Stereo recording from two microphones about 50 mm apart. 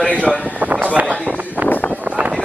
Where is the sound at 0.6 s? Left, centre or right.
Right.